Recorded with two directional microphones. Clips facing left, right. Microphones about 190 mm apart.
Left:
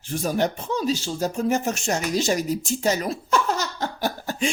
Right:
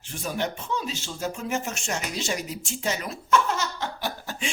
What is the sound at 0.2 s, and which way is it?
Speech, 40° left (ahead or behind).